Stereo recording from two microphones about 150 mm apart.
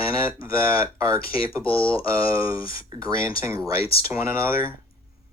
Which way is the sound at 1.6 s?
35° left (ahead or behind).